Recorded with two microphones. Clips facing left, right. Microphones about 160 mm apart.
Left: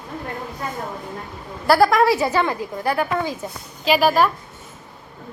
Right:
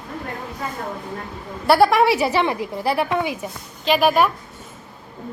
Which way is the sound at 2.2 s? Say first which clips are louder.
Right 1 dB; 15° right (ahead or behind).